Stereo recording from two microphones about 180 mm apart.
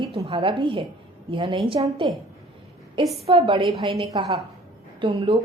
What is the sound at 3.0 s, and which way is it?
Speech, centre (ahead or behind).